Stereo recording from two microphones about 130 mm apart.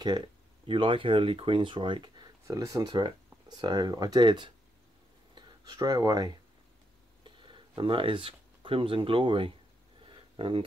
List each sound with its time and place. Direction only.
0.7 s speech: 40° right (ahead or behind)
2.4 s speech: 25° right (ahead or behind); by 9.5 s 40° right (ahead or behind)
10.0 s a sound: 40° right (ahead or behind)